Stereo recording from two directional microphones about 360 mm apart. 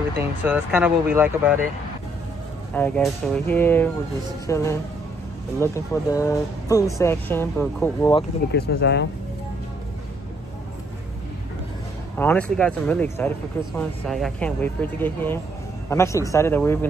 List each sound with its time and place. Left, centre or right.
0.4 s speech: centre
2.7 s speech: centre
8.5 s speech: left
12.2 s speech: centre